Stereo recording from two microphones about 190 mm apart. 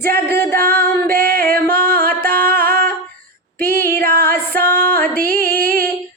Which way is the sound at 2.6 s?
50° right (ahead or behind).